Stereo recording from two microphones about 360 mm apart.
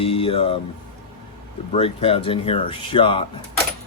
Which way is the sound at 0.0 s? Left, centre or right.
Centre.